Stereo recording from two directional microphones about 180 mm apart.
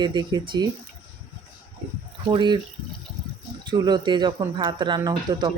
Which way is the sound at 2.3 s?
25° right (ahead or behind).